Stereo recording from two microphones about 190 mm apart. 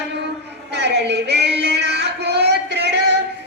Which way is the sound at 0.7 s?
60° right (ahead or behind).